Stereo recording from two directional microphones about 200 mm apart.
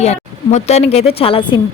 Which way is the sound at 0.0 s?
35° left (ahead or behind).